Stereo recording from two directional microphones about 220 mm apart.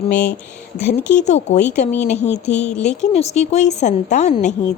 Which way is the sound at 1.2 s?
30° left (ahead or behind).